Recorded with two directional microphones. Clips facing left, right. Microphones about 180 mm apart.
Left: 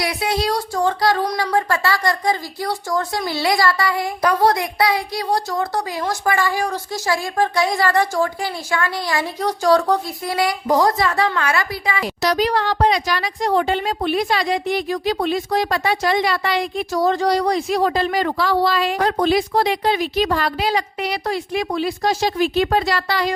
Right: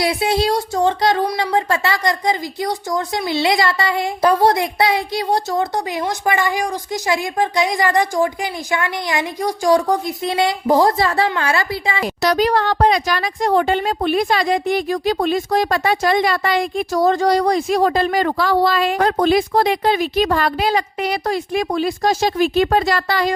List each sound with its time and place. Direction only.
0.0 s a sound: 25° right (ahead or behind)
1.5 s speech: 20° right (ahead or behind)
10.3 s speech: 25° right (ahead or behind)
12.0 s speech: 50° right (ahead or behind)